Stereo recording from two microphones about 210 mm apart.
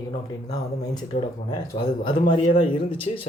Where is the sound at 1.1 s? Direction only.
25° left (ahead or behind).